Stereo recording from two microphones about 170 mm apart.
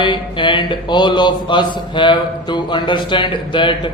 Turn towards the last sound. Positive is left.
turn(degrees=30)  # may be behind; listen again after turning